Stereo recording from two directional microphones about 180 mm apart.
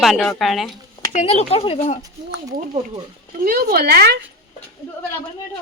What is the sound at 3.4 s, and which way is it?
Speech, 55° right (ahead or behind).